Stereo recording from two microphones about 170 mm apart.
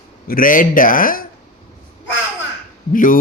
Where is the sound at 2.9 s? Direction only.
55° left (ahead or behind).